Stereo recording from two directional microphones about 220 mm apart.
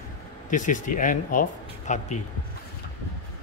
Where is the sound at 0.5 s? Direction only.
35° left (ahead or behind).